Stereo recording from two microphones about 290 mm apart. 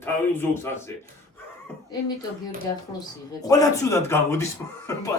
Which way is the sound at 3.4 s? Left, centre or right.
Centre.